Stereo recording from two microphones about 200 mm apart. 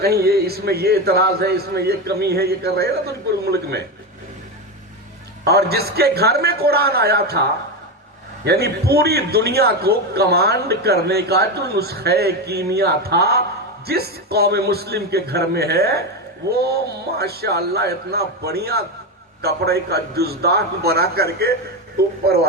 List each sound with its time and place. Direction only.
0.0 s a man's voice: 50° right (ahead or behind)
5.5 s a man's voice: 55° right (ahead or behind)
8.4 s a man's voice: 55° right (ahead or behind)